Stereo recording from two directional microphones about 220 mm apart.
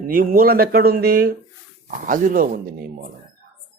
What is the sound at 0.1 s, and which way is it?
Speech, 40° right (ahead or behind).